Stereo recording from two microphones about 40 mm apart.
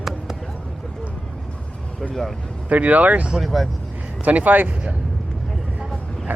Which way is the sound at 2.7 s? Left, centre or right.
Right.